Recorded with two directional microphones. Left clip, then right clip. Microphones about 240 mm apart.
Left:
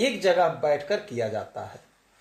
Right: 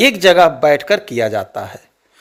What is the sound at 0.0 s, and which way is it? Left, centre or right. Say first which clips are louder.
Speech: right 12 dB; right.